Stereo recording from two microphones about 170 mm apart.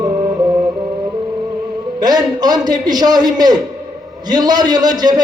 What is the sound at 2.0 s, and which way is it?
A man's voice, 25° right (ahead or behind).